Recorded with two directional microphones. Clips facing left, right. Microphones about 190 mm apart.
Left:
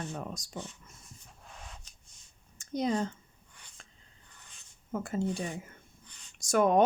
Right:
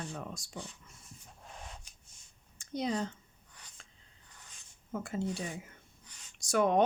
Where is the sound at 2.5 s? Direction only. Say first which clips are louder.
Left 4 dB; 45° left (ahead or behind).